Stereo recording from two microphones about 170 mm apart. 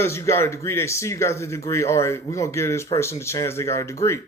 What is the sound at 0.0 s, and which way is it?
A man's voice, 15° left (ahead or behind).